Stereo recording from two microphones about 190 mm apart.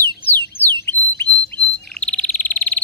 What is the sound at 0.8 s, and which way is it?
Bird, 10° left (ahead or behind).